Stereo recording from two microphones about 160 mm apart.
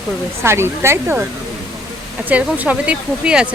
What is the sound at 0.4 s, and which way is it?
Speech, 15° right (ahead or behind).